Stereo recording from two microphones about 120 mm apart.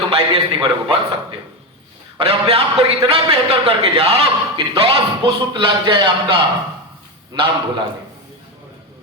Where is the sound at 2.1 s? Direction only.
50° right (ahead or behind).